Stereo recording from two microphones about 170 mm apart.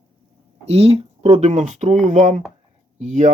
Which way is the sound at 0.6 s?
35° right (ahead or behind).